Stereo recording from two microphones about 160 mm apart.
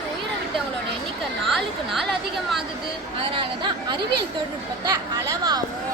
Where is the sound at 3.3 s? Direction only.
30° right (ahead or behind).